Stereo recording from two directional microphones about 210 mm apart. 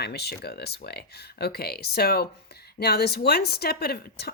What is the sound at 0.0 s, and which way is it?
A woman's voice, 50° left (ahead or behind).